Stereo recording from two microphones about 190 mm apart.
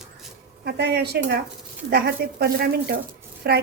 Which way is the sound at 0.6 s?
60° right (ahead or behind).